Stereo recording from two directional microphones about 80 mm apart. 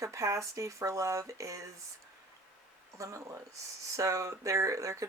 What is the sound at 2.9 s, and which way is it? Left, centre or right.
Speech, right.